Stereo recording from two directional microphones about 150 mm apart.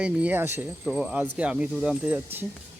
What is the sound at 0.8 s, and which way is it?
Speech, 5° right (ahead or behind).